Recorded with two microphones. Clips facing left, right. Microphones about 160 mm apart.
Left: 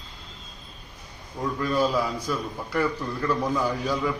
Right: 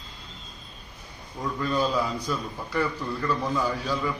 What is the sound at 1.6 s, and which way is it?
A man's voice, 10° left (ahead or behind).